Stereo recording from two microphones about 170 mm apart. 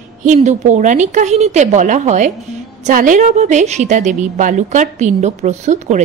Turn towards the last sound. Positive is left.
turn(degrees=-45)  # may be behind; listen again after turning